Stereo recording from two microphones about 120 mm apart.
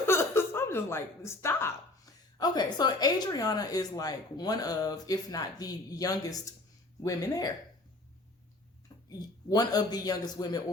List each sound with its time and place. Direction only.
0.0 s a sound: 20° left (ahead or behind)
2.4 s speech: 35° left (ahead or behind)
9.0 s speech: 35° left (ahead or behind)